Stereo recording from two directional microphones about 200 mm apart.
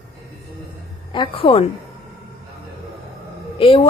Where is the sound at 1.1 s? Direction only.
25° left (ahead or behind).